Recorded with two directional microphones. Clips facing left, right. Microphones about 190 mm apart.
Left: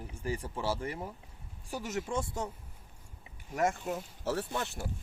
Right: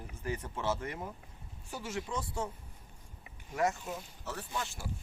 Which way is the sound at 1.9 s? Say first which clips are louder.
Left 3 dB; 45° left (ahead or behind).